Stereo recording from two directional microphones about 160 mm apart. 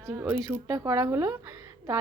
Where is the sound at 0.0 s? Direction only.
15° right (ahead or behind).